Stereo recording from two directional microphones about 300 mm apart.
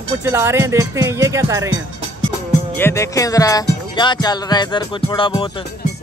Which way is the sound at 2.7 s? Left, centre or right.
Centre.